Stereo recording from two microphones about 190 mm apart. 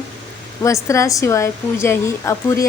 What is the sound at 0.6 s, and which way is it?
Speech, 15° left (ahead or behind).